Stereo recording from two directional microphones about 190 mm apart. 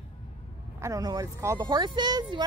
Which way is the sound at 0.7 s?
15° right (ahead or behind).